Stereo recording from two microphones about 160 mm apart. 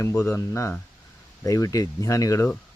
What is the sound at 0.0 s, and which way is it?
Speech, 15° left (ahead or behind).